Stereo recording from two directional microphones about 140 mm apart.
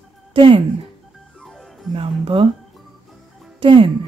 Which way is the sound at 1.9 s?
40° right (ahead or behind).